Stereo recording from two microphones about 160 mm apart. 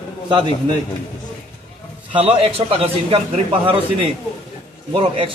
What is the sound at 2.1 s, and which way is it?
A man's voice, 40° right (ahead or behind).